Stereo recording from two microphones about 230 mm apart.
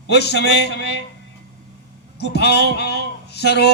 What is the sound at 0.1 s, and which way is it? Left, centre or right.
Speech, left.